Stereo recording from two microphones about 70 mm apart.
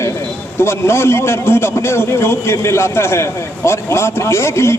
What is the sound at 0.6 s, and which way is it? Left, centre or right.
A man's voice, left.